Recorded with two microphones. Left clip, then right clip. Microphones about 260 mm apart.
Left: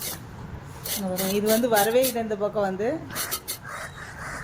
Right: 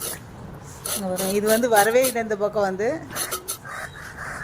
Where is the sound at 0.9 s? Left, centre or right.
Centre.